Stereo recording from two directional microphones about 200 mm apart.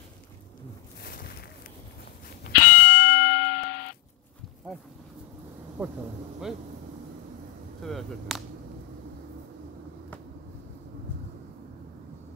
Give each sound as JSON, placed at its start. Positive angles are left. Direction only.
{"t": 2.6, "sound": "fire alarm", "side_deg": 50}
{"t": 5.8, "sound": "speech", "side_deg": -5}
{"t": 7.8, "sound": "speech", "side_deg": 0}